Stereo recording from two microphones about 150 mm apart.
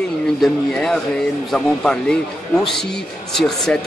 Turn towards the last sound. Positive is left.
turn(degrees=5)  # may be behind; listen again after turning